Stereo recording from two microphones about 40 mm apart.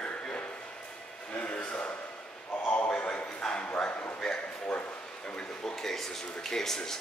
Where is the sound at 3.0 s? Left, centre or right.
Left.